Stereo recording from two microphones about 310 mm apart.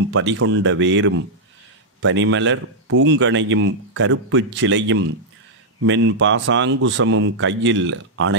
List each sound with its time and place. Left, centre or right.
0.1 s a man's voice: right